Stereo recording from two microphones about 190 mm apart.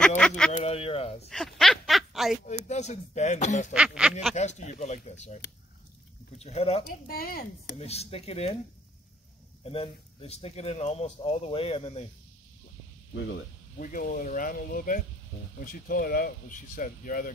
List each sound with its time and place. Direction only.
0.5 s speech: 35° left (ahead or behind)
1.3 s speech: centre (ahead or behind)
2.4 s speech: 35° left (ahead or behind)
3.7 s a sound: 5° right (ahead or behind)
4.4 s speech: 40° left (ahead or behind)
6.8 s speech: 55° left (ahead or behind)
7.7 s speech: 35° left (ahead or behind)
9.7 s speech: 30° left (ahead or behind)
13.7 s speech: 45° left (ahead or behind)